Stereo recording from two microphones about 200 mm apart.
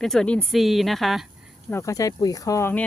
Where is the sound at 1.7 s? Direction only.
15° left (ahead or behind).